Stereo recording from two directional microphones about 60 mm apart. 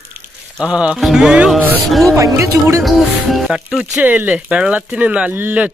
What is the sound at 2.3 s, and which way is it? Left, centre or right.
Speech, right.